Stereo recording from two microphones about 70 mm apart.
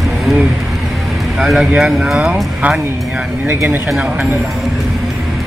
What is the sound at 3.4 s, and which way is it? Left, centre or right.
Speech, right.